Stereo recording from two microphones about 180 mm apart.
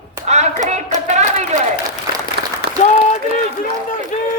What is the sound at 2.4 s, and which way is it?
Applause, 65° right (ahead or behind).